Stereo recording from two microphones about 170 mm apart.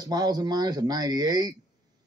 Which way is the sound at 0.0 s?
25° right (ahead or behind).